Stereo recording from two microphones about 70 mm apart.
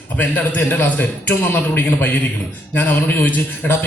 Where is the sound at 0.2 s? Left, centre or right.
Left.